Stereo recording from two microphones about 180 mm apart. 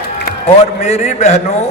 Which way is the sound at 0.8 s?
40° left (ahead or behind).